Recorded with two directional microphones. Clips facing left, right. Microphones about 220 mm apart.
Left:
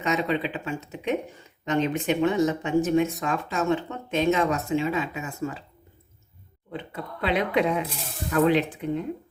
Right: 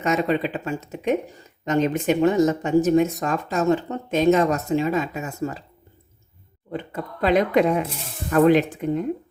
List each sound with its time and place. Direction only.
0.0 s speech: 45° right (ahead or behind)
6.7 s speech: 45° right (ahead or behind)